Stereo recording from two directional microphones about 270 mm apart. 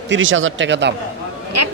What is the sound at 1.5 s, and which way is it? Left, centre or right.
Speech, right.